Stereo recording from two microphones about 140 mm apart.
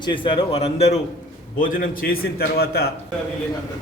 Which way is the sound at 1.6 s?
75° left (ahead or behind).